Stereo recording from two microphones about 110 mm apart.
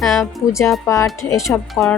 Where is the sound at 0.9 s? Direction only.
30° left (ahead or behind).